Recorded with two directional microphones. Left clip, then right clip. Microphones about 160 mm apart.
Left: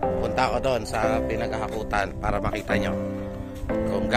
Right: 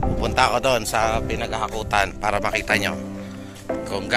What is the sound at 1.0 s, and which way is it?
A man's voice, centre (ahead or behind).